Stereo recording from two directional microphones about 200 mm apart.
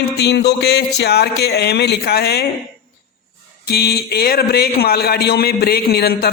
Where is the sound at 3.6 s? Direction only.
50° left (ahead or behind).